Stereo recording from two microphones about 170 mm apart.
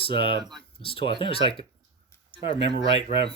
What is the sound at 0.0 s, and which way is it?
Speech, 30° left (ahead or behind).